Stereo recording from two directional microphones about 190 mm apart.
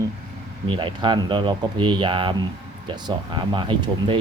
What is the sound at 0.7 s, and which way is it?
Speech, 25° right (ahead or behind).